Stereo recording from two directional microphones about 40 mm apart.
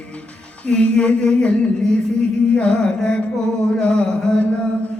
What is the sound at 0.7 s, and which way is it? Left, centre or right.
Mantra, left.